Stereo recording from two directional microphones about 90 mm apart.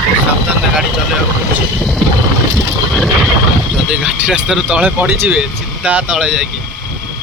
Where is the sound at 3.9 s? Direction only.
10° right (ahead or behind).